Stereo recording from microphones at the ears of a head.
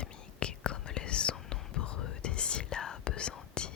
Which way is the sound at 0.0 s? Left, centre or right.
Left.